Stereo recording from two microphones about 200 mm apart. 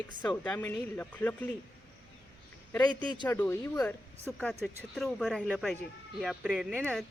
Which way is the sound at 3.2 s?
10° left (ahead or behind).